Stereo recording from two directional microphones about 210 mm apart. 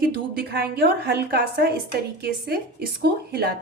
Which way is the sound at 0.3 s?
50° right (ahead or behind).